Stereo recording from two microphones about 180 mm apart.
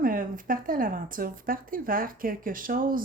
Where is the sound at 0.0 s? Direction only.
50° right (ahead or behind).